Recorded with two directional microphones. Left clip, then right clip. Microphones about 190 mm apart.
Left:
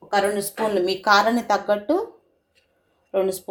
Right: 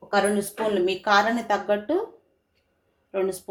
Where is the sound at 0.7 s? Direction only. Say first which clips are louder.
Left 3 dB; 20° left (ahead or behind).